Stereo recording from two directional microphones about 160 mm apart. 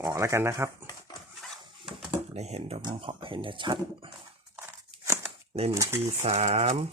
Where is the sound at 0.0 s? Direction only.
20° right (ahead or behind).